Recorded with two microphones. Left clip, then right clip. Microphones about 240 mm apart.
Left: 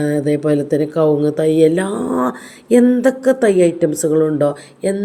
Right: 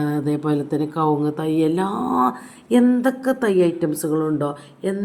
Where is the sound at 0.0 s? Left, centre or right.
Centre.